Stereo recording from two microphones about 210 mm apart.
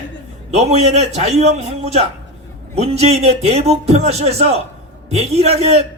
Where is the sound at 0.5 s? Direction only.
30° right (ahead or behind).